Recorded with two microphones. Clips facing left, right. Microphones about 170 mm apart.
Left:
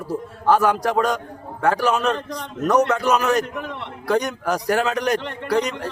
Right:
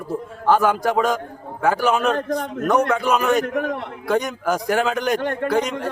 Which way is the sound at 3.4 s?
50° right (ahead or behind).